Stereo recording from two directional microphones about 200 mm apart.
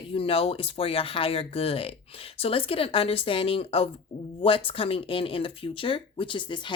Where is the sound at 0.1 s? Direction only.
25° left (ahead or behind).